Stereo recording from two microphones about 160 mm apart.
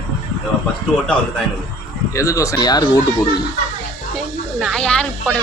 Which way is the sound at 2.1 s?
20° left (ahead or behind).